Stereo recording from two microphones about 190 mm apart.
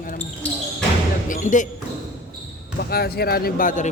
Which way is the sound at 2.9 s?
55° left (ahead or behind).